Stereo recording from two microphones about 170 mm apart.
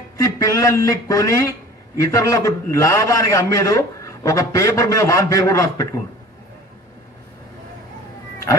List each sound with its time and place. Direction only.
0.2 s a man's voice: 20° left (ahead or behind)